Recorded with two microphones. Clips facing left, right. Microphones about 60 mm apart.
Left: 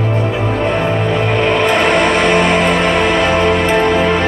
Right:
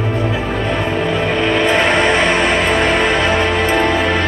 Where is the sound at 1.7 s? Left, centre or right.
Right.